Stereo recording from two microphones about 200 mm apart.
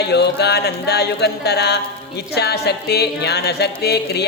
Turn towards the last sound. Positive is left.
turn(degrees=55)  # may be behind; listen again after turning